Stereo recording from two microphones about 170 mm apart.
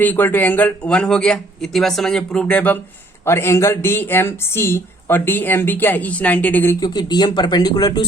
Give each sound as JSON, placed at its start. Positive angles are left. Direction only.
{"t": 0.0, "sound": "speech", "side_deg": 10}
{"t": 6.7, "sound": "speech", "side_deg": 25}